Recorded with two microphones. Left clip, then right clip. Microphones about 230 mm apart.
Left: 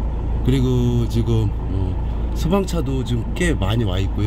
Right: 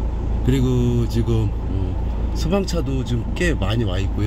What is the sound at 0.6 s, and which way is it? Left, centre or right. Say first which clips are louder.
Speech: even; centre.